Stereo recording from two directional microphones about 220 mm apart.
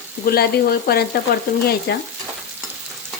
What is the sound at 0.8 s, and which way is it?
Frying, 45° left (ahead or behind).